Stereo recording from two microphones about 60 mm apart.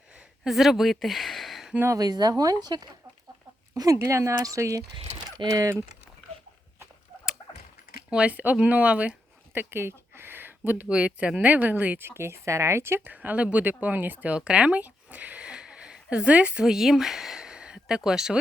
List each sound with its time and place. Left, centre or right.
0.4 s speech: centre
1.9 s speech: right
3.9 s speech: right
8.1 s speech: right
9.6 s a sound: right
10.8 s speech: right
11.4 s speech: right
12.0 s speech: right
13.1 s speech: right
16.6 s speech: centre